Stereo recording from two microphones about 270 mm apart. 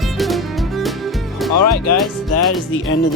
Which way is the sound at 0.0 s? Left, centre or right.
Centre.